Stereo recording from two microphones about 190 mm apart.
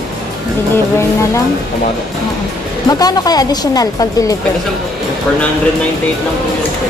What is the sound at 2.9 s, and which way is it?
Speech, 20° left (ahead or behind).